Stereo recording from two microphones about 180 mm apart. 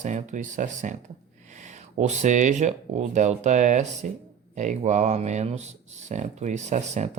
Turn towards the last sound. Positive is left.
turn(degrees=-40)  # may be behind; listen again after turning